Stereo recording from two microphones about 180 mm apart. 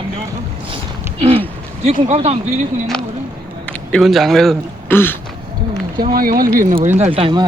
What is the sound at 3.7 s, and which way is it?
Speech, centre (ahead or behind).